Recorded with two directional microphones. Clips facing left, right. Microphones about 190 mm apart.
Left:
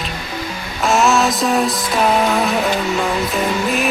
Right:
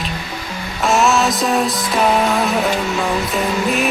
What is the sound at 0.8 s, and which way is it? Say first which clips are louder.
Music: even; centre (ahead or behind).